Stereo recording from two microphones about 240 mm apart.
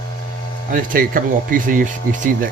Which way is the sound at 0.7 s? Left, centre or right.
Right.